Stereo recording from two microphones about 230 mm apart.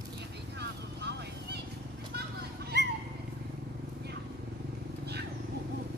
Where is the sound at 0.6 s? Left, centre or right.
Right.